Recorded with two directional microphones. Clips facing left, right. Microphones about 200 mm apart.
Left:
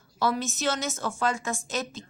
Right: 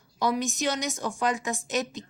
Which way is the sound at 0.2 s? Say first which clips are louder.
Right 1 dB; 15° right (ahead or behind).